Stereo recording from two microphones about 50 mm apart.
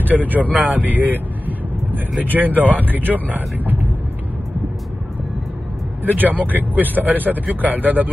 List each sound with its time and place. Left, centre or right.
0.0 s speech: right
6.0 s speech: right